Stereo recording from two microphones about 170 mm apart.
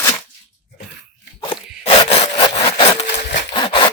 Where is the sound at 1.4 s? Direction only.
30° left (ahead or behind).